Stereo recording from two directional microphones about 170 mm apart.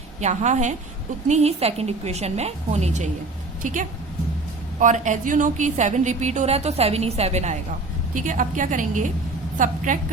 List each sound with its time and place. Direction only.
0.2 s a woman's voice: 40° right (ahead or behind)
8.1 s a woman's voice: 50° right (ahead or behind)